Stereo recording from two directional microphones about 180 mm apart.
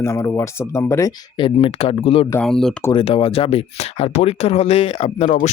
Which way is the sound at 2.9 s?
30° left (ahead or behind).